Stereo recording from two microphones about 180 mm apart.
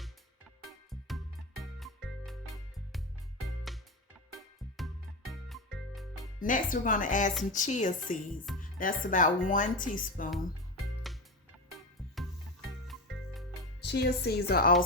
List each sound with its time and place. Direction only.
0.9 s music: centre (ahead or behind)
5.3 s music: centre (ahead or behind)
6.4 s speech: 50° left (ahead or behind)
11.1 s music: centre (ahead or behind)
12.9 s music: centre (ahead or behind)
13.8 s a woman's voice: 70° left (ahead or behind)